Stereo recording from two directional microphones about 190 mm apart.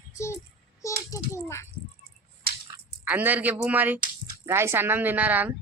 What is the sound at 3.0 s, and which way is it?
Speech, 10° right (ahead or behind).